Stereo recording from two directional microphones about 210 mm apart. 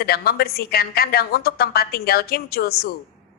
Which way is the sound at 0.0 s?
45° left (ahead or behind).